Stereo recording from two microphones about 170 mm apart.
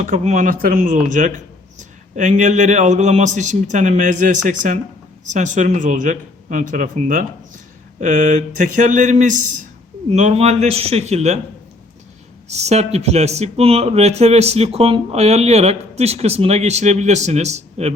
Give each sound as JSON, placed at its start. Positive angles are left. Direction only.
{"t": 0.0, "sound": "a man's voice", "side_deg": -50}
{"t": 12.5, "sound": "speech", "side_deg": -40}